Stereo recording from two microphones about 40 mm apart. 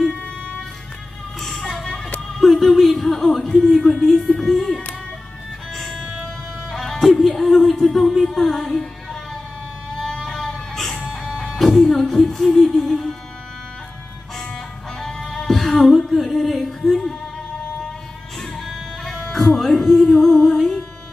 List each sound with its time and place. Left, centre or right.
1.4 s a sound: centre
2.3 s music: centre
3.7 s speech: centre
4.4 s a child's voice: centre
5.8 s music: centre
7.6 s a sound: centre
8.2 s music: centre
10.2 s music: centre
15.0 s music: centre
18.4 s music: centre